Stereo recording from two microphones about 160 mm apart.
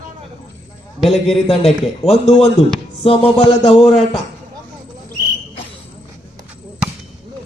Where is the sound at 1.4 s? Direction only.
40° left (ahead or behind).